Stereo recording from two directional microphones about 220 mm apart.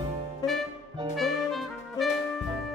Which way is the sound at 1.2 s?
Centre (ahead or behind).